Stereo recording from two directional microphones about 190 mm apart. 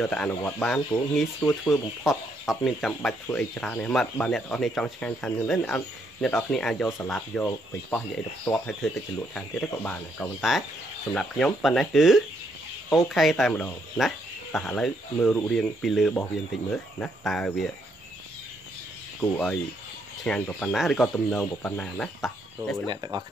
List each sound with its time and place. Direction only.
0.0 s speech: 5° left (ahead or behind)
19.3 s speech: 5° left (ahead or behind)
22.8 s speech: 20° right (ahead or behind)